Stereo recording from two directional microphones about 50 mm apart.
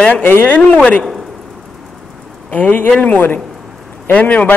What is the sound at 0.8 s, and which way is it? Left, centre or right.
Speech, left.